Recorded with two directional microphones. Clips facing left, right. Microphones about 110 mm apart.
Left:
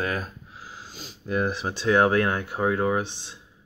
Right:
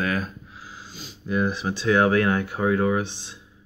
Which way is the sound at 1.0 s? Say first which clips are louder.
Right 1 dB; 45° left (ahead or behind).